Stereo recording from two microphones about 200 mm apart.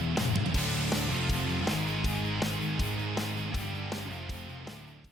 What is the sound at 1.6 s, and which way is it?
Music, centre (ahead or behind).